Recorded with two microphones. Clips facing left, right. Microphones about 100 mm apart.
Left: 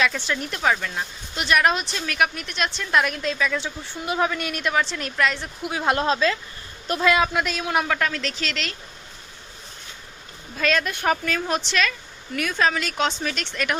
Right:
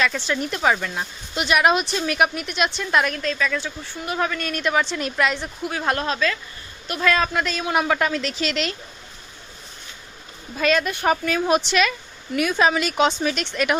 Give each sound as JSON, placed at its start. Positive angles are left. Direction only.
{"t": 0.0, "sound": "speech", "side_deg": 0}
{"t": 2.0, "sound": "speech", "side_deg": -20}
{"t": 3.2, "sound": "a man's voice", "side_deg": 15}
{"t": 5.6, "sound": "a man's voice", "side_deg": 15}
{"t": 7.9, "sound": "speech", "side_deg": -15}
{"t": 10.6, "sound": "speech", "side_deg": -5}